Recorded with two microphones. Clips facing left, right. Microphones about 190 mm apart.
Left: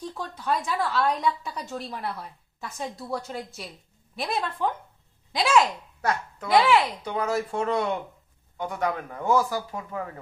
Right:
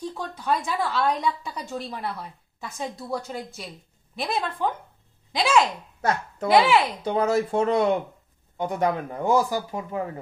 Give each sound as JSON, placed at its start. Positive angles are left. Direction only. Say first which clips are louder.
{"t": 0.4, "sound": "a woman's voice", "louder": "right 1 dB", "side_deg": 0}
{"t": 5.9, "sound": "speech", "louder": "right 3 dB", "side_deg": -30}